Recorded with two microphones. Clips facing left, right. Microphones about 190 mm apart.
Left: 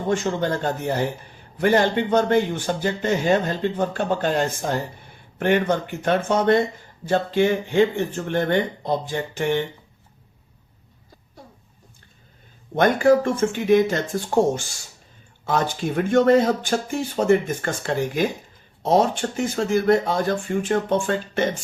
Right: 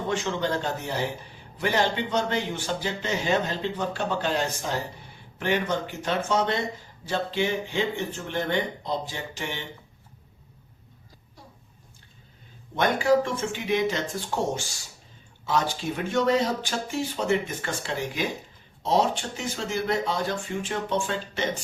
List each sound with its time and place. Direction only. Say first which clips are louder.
0.1 s speech: left 5 dB; 45° left (ahead or behind)
12.7 s speech: left 5 dB; 50° left (ahead or behind)